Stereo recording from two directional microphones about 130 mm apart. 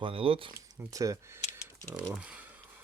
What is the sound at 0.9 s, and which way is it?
Speech, 25° right (ahead or behind).